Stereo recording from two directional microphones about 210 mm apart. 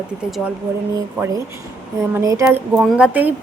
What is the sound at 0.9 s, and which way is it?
A woman's voice, 15° right (ahead or behind).